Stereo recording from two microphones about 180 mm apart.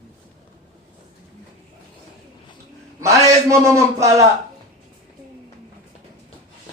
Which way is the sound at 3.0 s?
15° right (ahead or behind).